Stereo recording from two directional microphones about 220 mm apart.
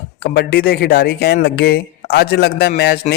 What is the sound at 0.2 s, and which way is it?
Speech, 45° left (ahead or behind).